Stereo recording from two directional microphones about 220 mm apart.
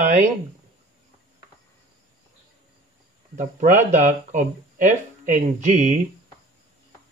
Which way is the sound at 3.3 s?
35° right (ahead or behind).